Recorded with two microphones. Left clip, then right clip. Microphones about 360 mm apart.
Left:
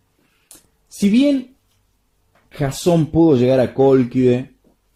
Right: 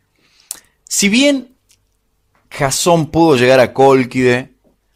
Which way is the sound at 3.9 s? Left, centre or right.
Centre.